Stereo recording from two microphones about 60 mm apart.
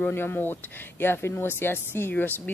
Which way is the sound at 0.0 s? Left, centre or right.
Left.